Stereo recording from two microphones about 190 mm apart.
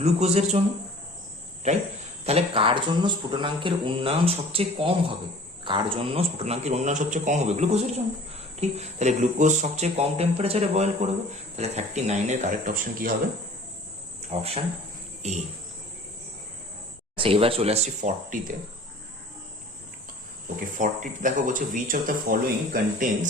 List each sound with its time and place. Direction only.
0.0 s speech: 35° right (ahead or behind)
2.2 s speech: 30° right (ahead or behind)
14.2 s speech: 30° right (ahead or behind)
17.2 s speech: 30° right (ahead or behind)
20.7 s speech: 45° right (ahead or behind)